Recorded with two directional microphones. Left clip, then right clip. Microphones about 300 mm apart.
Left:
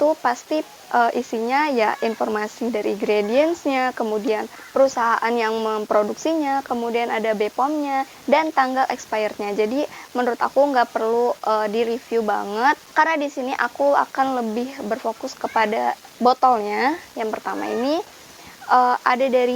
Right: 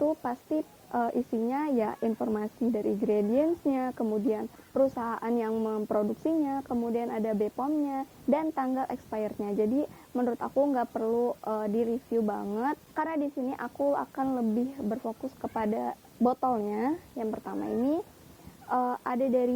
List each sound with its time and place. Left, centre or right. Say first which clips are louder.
0.0 s a woman's voice: left 11 dB; centre
9.6 s a woman's voice: left 7 dB; left
10.2 s a woman's voice: left 10 dB; centre